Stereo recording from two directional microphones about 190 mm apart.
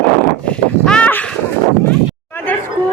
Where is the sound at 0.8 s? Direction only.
5° left (ahead or behind).